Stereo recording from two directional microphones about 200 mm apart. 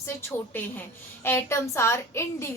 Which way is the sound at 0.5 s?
10° left (ahead or behind).